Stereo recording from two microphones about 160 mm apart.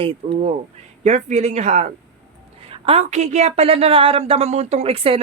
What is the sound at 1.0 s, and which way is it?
A woman's voice, 50° right (ahead or behind).